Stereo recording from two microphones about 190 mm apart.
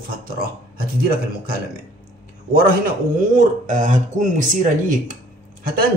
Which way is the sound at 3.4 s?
40° right (ahead or behind).